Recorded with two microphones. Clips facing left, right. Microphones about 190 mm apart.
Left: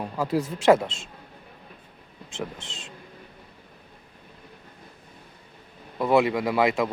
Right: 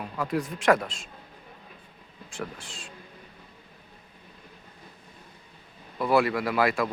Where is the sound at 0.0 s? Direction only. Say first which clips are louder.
Left 3 dB; 25° left (ahead or behind).